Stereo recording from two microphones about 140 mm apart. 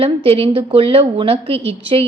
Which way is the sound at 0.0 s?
45° right (ahead or behind).